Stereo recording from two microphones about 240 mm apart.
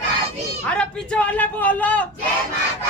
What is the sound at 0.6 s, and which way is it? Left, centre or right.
A man's voice, centre.